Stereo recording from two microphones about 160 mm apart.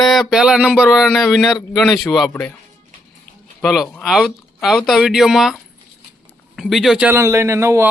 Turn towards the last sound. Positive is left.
turn(degrees=-15)  # may be behind; listen again after turning